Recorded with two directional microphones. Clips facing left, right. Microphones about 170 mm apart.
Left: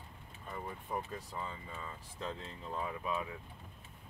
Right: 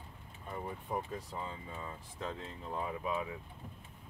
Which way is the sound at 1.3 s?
15° right (ahead or behind).